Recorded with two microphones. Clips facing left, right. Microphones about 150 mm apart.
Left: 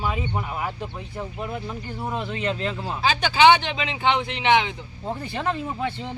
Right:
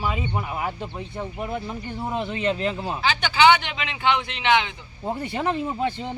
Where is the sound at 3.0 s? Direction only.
35° left (ahead or behind).